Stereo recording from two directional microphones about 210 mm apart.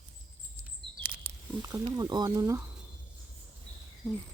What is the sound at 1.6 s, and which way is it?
Speech, 15° right (ahead or behind).